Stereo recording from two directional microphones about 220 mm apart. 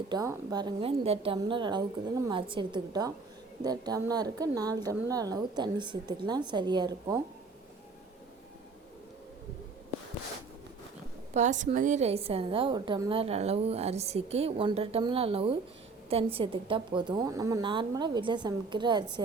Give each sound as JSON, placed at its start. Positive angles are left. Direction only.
{"t": 0.1, "sound": "a woman's voice", "side_deg": -15}
{"t": 11.3, "sound": "a woman's voice", "side_deg": -35}